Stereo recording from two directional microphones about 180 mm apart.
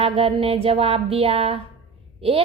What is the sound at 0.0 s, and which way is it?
A woman's voice, 35° right (ahead or behind).